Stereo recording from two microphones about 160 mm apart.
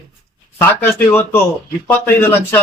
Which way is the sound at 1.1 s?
15° left (ahead or behind).